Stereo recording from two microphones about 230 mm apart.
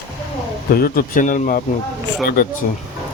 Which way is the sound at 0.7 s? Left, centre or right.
Left.